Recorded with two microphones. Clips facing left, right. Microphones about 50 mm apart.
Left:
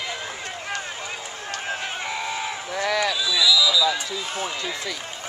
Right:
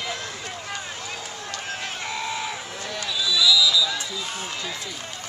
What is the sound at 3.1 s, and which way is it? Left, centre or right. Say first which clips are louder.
Run: even; centre.